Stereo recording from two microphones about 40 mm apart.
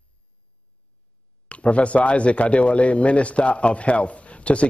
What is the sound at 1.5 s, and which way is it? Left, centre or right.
Speech, left.